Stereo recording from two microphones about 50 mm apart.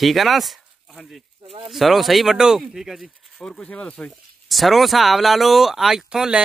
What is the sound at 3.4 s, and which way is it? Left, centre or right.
Speech, centre.